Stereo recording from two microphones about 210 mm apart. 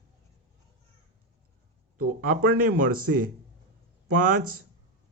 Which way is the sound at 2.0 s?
45° right (ahead or behind).